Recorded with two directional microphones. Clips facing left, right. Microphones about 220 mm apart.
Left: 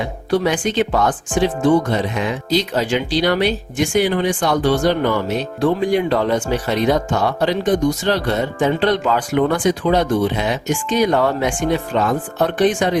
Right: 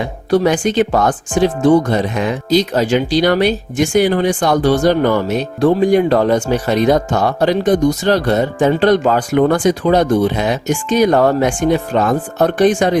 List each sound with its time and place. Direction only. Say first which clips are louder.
0.3 s speech: right 5 dB; 40° right (ahead or behind)